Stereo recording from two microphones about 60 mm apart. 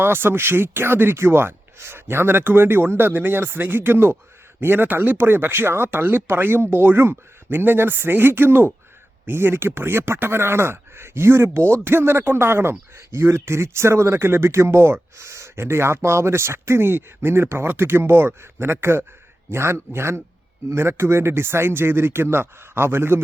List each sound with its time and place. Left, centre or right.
0.0 s speech: right